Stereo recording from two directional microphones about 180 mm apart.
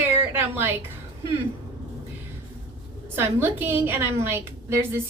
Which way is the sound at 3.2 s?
10° right (ahead or behind).